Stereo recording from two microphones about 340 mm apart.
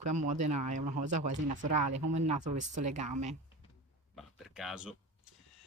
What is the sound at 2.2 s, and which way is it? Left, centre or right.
Speech, right.